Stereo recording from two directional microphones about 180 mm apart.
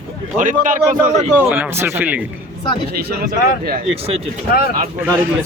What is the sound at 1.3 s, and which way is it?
Speech, 10° right (ahead or behind).